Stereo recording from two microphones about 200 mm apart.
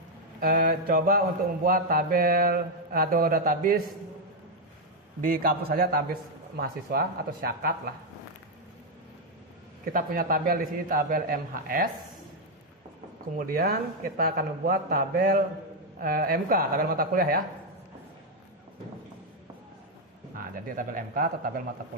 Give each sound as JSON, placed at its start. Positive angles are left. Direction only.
{"t": 0.3, "sound": "speech", "side_deg": -45}
{"t": 5.2, "sound": "speech", "side_deg": -45}
{"t": 9.9, "sound": "speech", "side_deg": -45}
{"t": 13.4, "sound": "speech", "side_deg": -50}
{"t": 20.3, "sound": "speech", "side_deg": -45}